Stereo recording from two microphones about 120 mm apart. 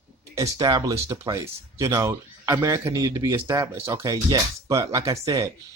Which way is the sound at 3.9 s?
30° right (ahead or behind).